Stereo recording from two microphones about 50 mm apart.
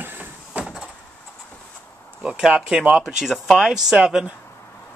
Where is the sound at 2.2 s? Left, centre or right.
Centre.